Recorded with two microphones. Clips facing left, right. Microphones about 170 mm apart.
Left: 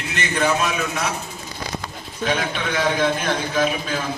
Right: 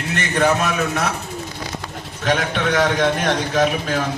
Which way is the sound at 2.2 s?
50° right (ahead or behind).